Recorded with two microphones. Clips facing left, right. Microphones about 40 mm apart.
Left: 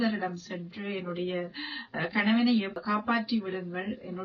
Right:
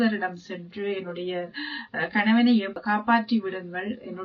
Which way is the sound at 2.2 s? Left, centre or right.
Right.